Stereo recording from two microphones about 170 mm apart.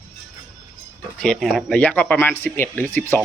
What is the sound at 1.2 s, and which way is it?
Speech, 5° left (ahead or behind).